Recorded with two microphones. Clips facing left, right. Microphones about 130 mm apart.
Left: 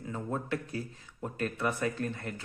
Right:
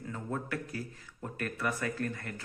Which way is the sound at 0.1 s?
20° left (ahead or behind).